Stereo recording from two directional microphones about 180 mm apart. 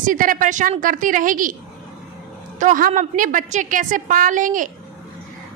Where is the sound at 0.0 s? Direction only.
50° right (ahead or behind).